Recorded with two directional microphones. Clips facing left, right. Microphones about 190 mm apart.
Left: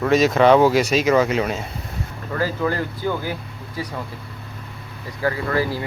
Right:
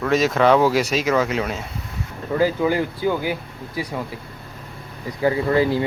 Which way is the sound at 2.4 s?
15° right (ahead or behind).